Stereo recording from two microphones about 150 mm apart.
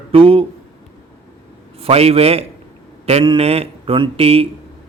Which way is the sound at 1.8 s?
40° right (ahead or behind).